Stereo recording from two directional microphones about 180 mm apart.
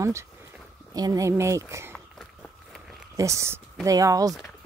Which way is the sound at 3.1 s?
15° right (ahead or behind).